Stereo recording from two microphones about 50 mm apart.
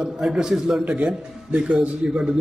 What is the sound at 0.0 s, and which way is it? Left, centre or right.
Speech, centre.